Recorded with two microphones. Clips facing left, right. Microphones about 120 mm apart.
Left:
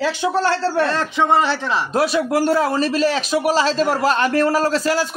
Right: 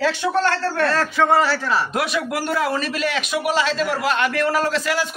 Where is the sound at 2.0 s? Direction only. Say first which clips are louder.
Left 6 dB; 35° left (ahead or behind).